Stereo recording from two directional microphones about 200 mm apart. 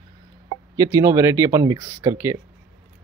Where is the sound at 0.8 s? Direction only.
15° right (ahead or behind).